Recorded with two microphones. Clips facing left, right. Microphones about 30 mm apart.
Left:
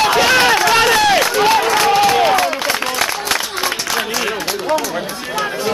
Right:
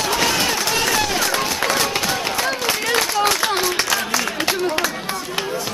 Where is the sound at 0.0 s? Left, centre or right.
Left.